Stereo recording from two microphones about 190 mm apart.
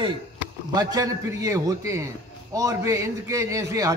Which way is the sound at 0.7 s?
20° right (ahead or behind).